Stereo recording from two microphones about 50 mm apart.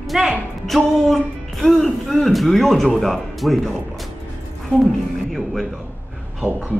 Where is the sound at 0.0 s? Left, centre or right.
Centre.